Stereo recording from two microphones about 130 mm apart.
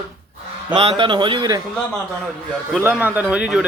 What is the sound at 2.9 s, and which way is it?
Speech, 15° right (ahead or behind).